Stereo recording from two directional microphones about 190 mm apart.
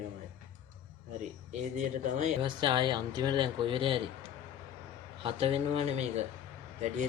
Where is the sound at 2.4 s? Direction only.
25° right (ahead or behind).